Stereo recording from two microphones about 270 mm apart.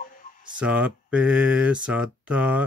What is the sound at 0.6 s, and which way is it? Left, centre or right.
Speech, centre.